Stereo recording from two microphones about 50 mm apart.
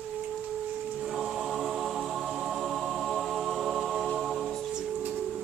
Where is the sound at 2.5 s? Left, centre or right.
Centre.